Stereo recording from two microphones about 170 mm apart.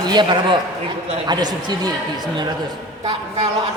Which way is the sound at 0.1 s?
25° right (ahead or behind).